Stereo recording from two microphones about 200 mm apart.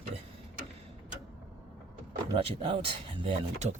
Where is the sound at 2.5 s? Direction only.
30° right (ahead or behind).